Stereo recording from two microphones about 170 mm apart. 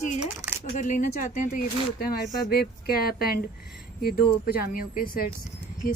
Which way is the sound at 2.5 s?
65° left (ahead or behind).